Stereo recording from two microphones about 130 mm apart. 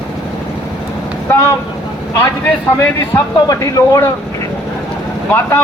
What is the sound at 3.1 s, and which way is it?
Speech, 25° left (ahead or behind).